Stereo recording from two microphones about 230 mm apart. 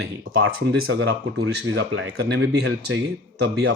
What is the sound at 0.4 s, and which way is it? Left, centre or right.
Speech, right.